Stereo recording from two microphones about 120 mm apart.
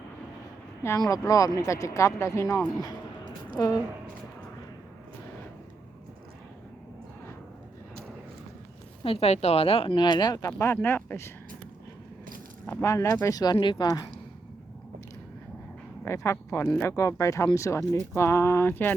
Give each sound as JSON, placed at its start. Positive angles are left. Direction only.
{"t": 0.8, "sound": "speech", "side_deg": 25}
{"t": 9.0, "sound": "speech", "side_deg": 60}
{"t": 10.6, "sound": "speech", "side_deg": 20}
{"t": 12.6, "sound": "speech", "side_deg": 25}
{"t": 16.0, "sound": "speech", "side_deg": 25}